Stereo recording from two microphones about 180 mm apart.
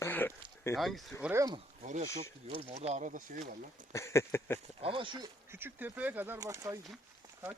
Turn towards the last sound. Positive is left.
turn(degrees=-15)  # may be behind; listen again after turning